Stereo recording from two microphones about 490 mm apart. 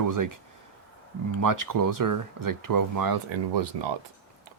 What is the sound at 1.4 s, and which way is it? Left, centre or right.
Speech, right.